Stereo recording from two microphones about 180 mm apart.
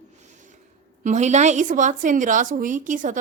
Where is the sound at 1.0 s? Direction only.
40° right (ahead or behind).